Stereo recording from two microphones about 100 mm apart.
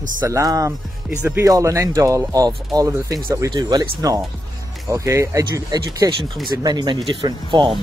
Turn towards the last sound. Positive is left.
turn(degrees=-50)  # may be behind; listen again after turning